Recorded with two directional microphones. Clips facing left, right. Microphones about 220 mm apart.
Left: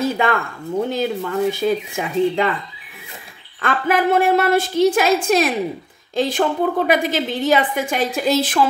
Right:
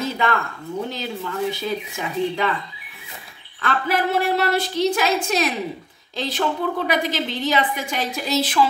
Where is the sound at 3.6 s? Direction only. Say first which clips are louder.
Left 4 dB; 50° left (ahead or behind).